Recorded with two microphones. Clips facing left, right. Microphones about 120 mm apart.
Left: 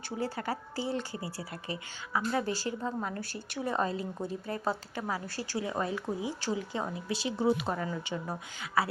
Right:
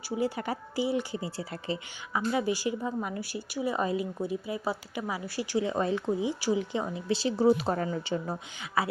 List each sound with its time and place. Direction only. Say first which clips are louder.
0.2 s a woman's voice: right 3 dB; 15° right (ahead or behind)
2.3 s a woman's voice: right 6 dB; 15° right (ahead or behind)
6.9 s speech: right 5 dB; 30° right (ahead or behind)
8.1 s a woman's voice: right 4 dB; 25° right (ahead or behind)